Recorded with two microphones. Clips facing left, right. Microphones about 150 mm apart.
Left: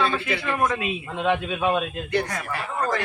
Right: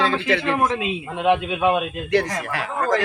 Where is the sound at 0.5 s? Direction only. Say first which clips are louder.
Right 2 dB; 20° right (ahead or behind).